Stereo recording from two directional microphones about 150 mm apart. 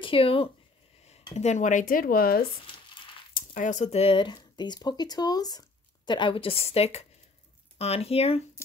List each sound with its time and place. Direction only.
0.0 s speech: 40° left (ahead or behind); by 2.4 s 80° left
3.3 s speech: 60° left (ahead or behind); by 8.4 s 40° left (ahead or behind)
8.6 s a sound: 15° left (ahead or behind)